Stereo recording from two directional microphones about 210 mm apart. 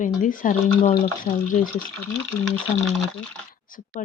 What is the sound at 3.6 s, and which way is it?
Speech, 40° left (ahead or behind).